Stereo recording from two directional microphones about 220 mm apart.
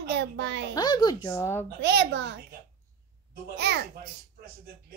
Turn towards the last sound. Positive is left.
turn(degrees=-50)  # may be behind; listen again after turning